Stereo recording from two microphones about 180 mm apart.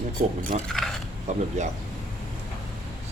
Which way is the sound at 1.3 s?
40° right (ahead or behind).